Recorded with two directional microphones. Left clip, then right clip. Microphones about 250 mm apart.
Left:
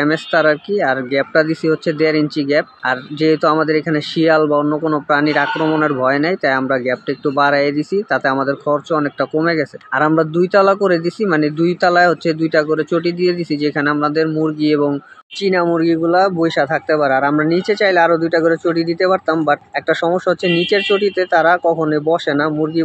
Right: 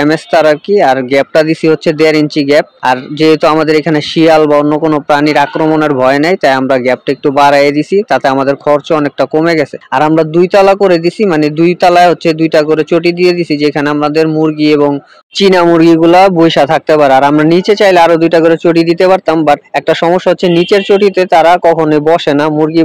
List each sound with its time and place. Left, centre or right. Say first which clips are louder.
0.0 s speech: right 6 dB; right